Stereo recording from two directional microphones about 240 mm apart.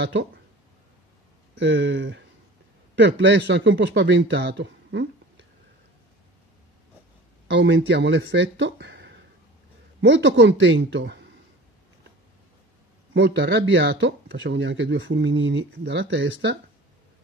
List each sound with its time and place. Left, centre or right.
0.0 s speech: right
1.6 s speech: right
7.4 s speech: right
13.1 s speech: right